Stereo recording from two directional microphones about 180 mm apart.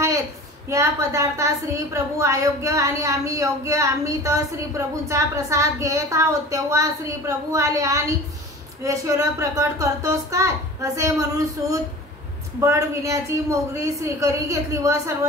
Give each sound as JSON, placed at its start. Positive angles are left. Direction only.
{"t": 0.7, "sound": "a woman's voice", "side_deg": -15}